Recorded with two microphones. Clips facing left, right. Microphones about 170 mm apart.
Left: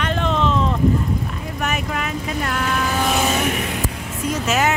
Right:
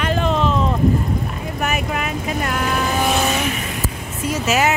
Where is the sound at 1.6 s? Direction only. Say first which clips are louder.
Right 2 dB; 10° right (ahead or behind).